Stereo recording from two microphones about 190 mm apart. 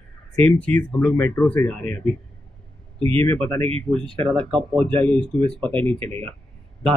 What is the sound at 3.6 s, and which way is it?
A man's voice, 30° right (ahead or behind).